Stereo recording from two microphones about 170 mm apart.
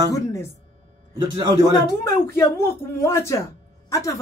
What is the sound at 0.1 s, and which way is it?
Speech, 20° left (ahead or behind).